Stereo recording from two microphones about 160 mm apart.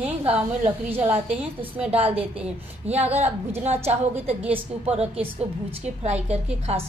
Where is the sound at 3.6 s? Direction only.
40° right (ahead or behind).